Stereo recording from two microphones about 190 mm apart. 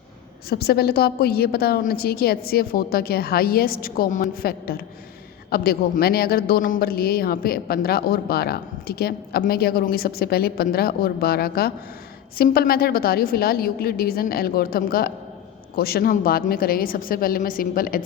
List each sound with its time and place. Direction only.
0.5 s a woman's voice: 55° left (ahead or behind)